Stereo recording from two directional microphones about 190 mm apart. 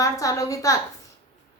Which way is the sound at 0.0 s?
20° left (ahead or behind).